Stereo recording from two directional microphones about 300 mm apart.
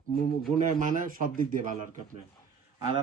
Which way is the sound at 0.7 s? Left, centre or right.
Right.